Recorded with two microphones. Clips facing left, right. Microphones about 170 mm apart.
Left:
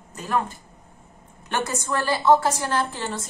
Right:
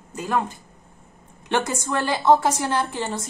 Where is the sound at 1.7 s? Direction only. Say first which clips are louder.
Right 1 dB; 15° right (ahead or behind).